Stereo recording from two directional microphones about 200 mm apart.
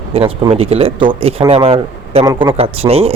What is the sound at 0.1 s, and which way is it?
A man's voice, 25° right (ahead or behind).